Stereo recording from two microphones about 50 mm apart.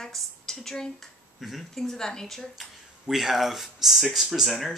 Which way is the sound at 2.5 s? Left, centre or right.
Centre.